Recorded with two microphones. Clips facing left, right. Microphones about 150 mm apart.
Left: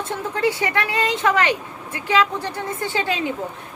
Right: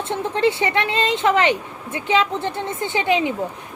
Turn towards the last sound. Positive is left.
turn(degrees=-20)  # may be behind; listen again after turning